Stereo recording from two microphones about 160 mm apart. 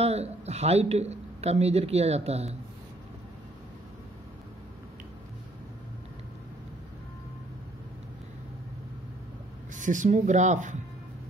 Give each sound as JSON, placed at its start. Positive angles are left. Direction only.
{"t": 0.0, "sound": "speech", "side_deg": -40}
{"t": 9.8, "sound": "speech", "side_deg": -50}